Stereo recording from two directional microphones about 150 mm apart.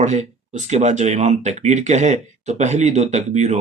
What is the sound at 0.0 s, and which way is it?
Speech, 50° right (ahead or behind).